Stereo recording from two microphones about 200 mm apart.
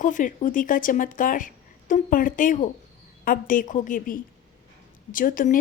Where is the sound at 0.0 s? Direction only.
40° left (ahead or behind).